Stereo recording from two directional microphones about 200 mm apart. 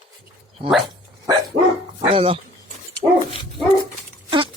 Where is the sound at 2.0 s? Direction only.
25° right (ahead or behind).